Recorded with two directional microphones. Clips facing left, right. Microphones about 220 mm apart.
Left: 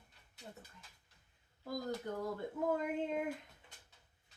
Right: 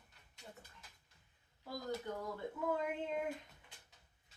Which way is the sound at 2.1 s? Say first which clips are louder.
Left 2 dB; 40° left (ahead or behind).